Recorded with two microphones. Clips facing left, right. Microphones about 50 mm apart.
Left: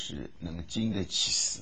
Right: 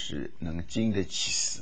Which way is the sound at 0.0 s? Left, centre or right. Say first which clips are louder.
Right 4 dB; right.